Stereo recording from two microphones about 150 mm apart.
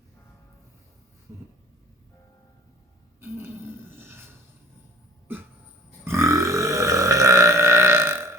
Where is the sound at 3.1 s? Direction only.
15° right (ahead or behind).